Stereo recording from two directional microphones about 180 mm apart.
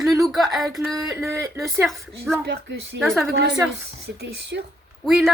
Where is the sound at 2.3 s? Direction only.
5° right (ahead or behind).